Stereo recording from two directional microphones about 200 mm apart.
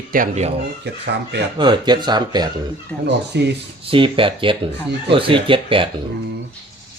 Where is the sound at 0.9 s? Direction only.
55° right (ahead or behind).